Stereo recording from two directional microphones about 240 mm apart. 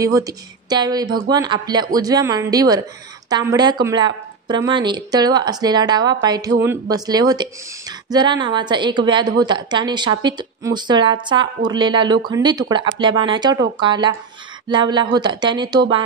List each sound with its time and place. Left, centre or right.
0.0 s a woman's voice: centre